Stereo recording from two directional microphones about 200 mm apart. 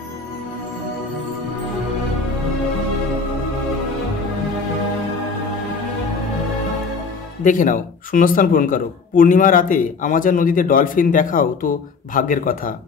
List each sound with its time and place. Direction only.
7.4 s speech: 40° left (ahead or behind)